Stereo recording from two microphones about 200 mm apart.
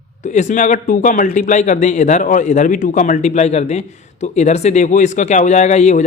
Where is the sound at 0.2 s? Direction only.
40° left (ahead or behind).